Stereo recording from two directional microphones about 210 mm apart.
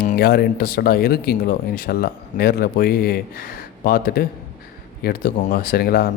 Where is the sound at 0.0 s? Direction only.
45° left (ahead or behind).